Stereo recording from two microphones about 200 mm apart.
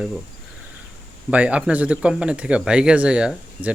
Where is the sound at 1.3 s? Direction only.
5° right (ahead or behind).